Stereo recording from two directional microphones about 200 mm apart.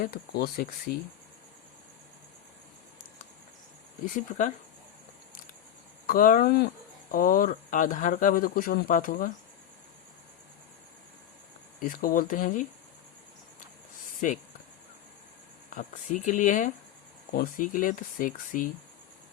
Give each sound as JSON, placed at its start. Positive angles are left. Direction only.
{"t": 0.0, "sound": "speech", "side_deg": 50}
{"t": 4.0, "sound": "speech", "side_deg": 40}
{"t": 6.1, "sound": "speech", "side_deg": 45}
{"t": 11.8, "sound": "speech", "side_deg": 45}
{"t": 14.2, "sound": "speech", "side_deg": 40}
{"t": 15.7, "sound": "speech", "side_deg": 40}